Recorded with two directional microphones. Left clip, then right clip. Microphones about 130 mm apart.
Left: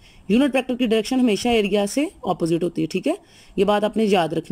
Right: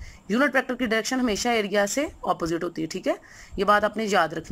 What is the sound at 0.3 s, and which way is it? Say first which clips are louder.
Speech: left 2 dB; 30° left (ahead or behind).